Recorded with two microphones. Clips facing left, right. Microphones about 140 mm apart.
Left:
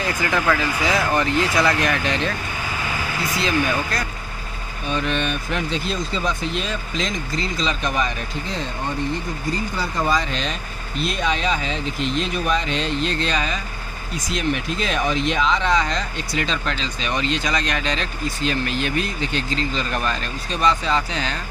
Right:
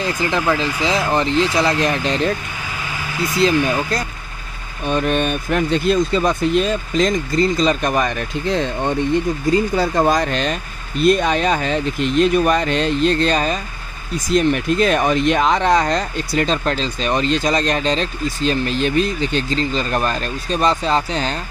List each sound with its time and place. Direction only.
0.0 s speech: 30° right (ahead or behind)
4.8 s speech: 50° right (ahead or behind)
9.8 s speech: 50° right (ahead or behind)